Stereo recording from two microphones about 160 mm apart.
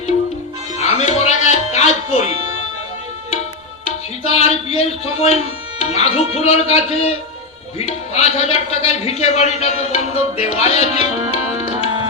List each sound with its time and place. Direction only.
0.8 s music: 45° left (ahead or behind)
3.8 s music: 40° left (ahead or behind)
5.8 s a man's voice: 40° left (ahead or behind)